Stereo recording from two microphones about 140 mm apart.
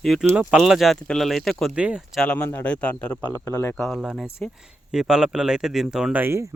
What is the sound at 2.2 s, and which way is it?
Speech, 5° left (ahead or behind).